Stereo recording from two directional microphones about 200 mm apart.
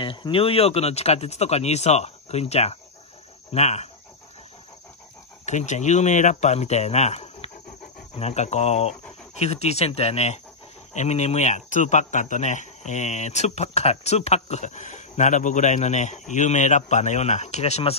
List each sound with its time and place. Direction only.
0.0 s speech: 25° left (ahead or behind)
5.4 s speech: 35° left (ahead or behind)